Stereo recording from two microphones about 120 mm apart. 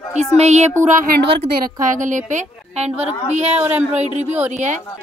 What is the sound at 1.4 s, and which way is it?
A woman's voice, 90° right.